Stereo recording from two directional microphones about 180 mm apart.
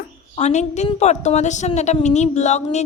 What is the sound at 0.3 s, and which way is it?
A woman's voice, 40° left (ahead or behind).